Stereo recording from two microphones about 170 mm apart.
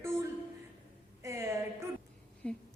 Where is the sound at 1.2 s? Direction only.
15° right (ahead or behind).